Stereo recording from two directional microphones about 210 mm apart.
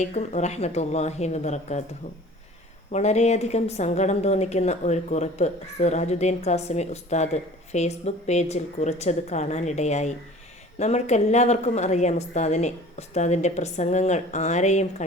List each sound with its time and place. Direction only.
0.0 s a woman's voice: 30° left (ahead or behind)
2.9 s a woman's voice: 30° left (ahead or behind)